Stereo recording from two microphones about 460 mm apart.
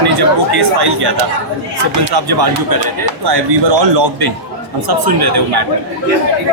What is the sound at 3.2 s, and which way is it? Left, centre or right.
Speech, right.